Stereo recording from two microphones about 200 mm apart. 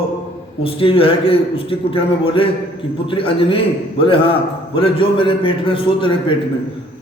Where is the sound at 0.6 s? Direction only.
25° left (ahead or behind).